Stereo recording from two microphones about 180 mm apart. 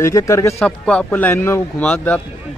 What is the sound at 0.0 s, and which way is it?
Speech, 20° left (ahead or behind).